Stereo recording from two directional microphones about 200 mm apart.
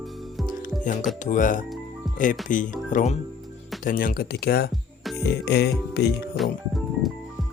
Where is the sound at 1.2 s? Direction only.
40° left (ahead or behind).